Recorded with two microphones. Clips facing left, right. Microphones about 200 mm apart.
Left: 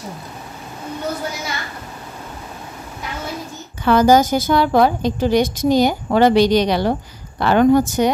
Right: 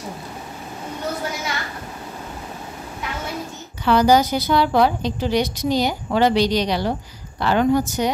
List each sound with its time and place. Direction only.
3.8 s a woman's voice: 45° left (ahead or behind)